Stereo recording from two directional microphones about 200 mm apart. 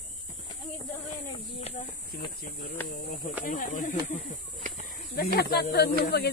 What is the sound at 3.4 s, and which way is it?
Speech, 40° left (ahead or behind).